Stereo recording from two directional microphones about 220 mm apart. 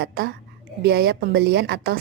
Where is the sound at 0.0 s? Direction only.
50° right (ahead or behind).